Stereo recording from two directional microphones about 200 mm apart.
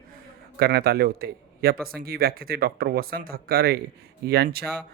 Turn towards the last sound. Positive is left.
turn(degrees=-50)  # may be behind; listen again after turning